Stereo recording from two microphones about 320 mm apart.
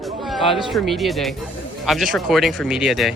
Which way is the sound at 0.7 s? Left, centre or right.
Centre.